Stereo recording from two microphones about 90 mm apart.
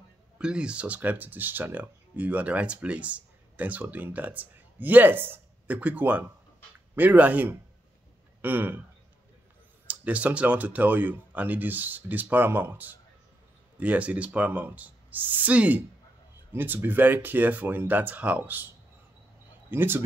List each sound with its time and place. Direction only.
0.4 s speech: 10° right (ahead or behind)
9.8 s speech: 15° right (ahead or behind)
19.7 s speech: 25° right (ahead or behind)